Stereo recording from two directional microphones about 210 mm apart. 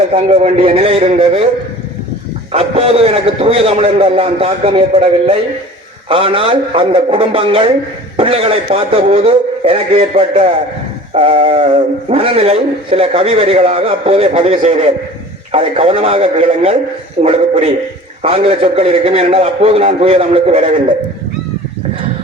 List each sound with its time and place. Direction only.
0.1 s speech: 25° right (ahead or behind)
2.5 s a man's voice: 30° right (ahead or behind)